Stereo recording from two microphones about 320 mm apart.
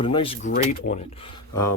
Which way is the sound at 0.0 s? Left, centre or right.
Centre.